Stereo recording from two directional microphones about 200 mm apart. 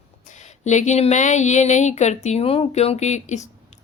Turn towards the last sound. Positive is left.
turn(degrees=35)  # may be behind; listen again after turning